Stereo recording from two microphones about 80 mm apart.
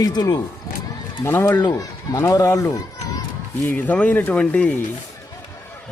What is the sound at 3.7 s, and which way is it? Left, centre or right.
Speech, left.